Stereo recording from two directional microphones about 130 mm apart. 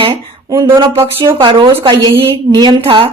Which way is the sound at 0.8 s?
45° right (ahead or behind).